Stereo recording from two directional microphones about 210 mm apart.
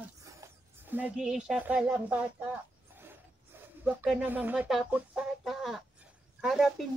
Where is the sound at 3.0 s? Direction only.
10° right (ahead or behind).